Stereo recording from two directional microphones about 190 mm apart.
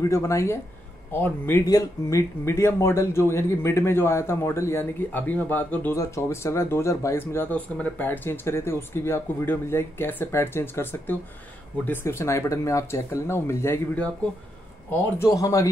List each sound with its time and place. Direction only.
0.0 s speech: 15° left (ahead or behind)